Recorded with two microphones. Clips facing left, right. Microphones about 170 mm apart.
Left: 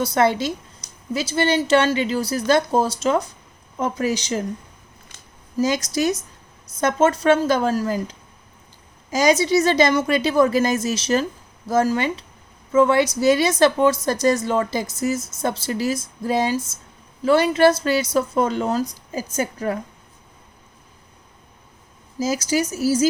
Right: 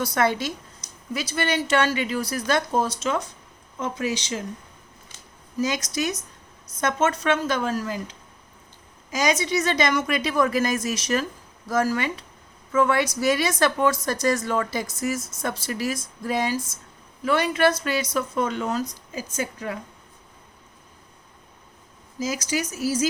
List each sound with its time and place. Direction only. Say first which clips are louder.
0.0 s a woman's voice: left 4 dB; 25° left (ahead or behind); by 4.4 s 40° left (ahead or behind)
5.5 s a woman's voice: left 5 dB; 35° left (ahead or behind)
9.0 s a woman's voice: left 6 dB; 35° left (ahead or behind)
22.2 s a woman's voice: left 5 dB; 30° left (ahead or behind)